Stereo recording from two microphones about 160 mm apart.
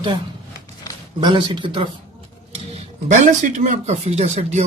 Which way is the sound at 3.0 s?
50° right (ahead or behind).